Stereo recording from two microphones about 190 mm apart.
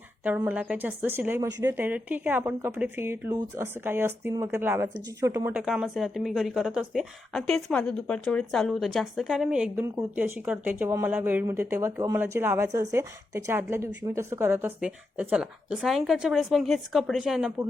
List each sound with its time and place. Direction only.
0.3 s speech: 10° right (ahead or behind)
5.5 s speech: 5° right (ahead or behind)